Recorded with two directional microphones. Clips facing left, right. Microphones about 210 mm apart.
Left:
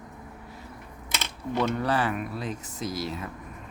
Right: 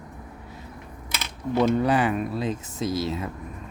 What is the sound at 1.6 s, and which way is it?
Speech, 20° right (ahead or behind).